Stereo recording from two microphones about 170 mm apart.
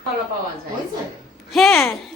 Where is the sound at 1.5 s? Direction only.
Centre (ahead or behind).